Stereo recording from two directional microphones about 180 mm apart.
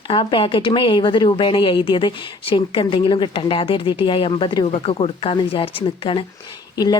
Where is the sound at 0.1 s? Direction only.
30° left (ahead or behind).